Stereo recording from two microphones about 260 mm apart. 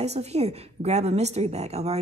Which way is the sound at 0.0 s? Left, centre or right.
Right.